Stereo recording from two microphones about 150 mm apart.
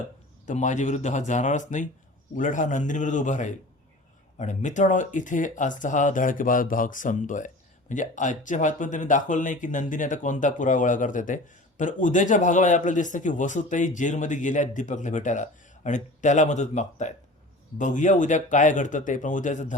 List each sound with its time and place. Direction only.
0.4 s speech: 55° left (ahead or behind)